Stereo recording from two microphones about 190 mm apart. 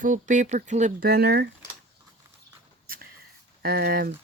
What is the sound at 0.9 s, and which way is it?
Speech, 55° right (ahead or behind).